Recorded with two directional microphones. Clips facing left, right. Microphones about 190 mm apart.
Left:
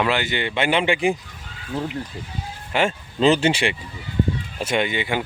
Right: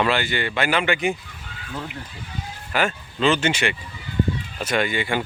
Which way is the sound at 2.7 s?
30° left (ahead or behind).